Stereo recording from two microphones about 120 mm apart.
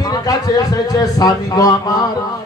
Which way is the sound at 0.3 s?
30° left (ahead or behind).